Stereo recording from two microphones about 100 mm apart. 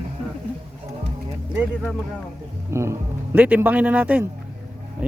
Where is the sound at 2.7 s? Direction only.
25° right (ahead or behind).